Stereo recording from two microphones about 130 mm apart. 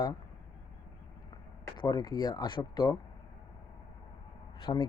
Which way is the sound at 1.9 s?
30° left (ahead or behind).